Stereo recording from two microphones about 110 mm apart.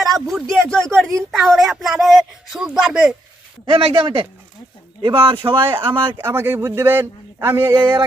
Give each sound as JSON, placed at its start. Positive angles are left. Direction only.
{"t": 0.0, "sound": "a man's voice", "side_deg": 0}
{"t": 3.7, "sound": "speech", "side_deg": -55}
{"t": 6.1, "sound": "speech", "side_deg": -20}